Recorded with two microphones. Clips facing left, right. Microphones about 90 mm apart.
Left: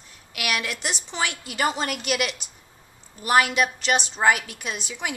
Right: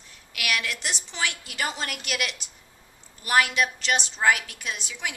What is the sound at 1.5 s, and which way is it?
Speech, 40° left (ahead or behind).